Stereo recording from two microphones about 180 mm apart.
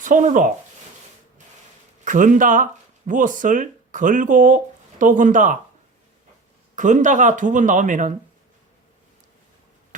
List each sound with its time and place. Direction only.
0.0 s speech: 45° right (ahead or behind)
2.0 s speech: 45° right (ahead or behind)
6.7 s speech: 45° right (ahead or behind)